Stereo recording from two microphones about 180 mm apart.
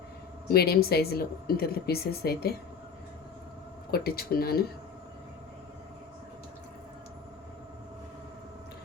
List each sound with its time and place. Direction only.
0.5 s speech: 60° left (ahead or behind)
3.9 s speech: 60° left (ahead or behind)